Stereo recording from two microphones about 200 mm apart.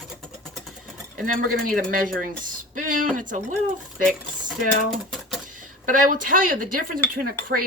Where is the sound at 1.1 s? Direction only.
45° right (ahead or behind).